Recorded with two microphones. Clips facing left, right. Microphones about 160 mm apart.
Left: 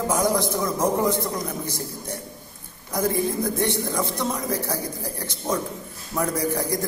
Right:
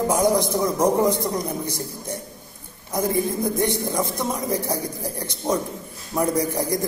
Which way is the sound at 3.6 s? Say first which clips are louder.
Right 1 dB; 10° right (ahead or behind).